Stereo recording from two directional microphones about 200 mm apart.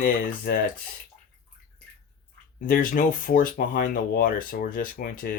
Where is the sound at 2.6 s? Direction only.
45° left (ahead or behind).